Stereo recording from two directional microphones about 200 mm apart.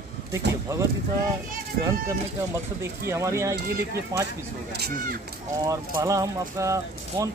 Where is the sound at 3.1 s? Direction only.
15° right (ahead or behind).